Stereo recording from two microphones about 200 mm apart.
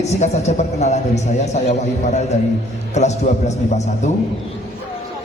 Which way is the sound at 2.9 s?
35° left (ahead or behind).